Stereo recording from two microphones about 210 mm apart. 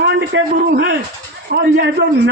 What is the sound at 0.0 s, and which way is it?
A man's voice, 50° right (ahead or behind).